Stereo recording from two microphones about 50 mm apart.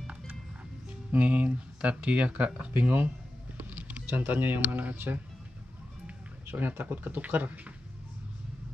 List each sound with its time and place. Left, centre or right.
1.1 s speech: right
3.5 s mechanisms: right
4.1 s speech: right
4.6 s speech: right
6.4 s speech: right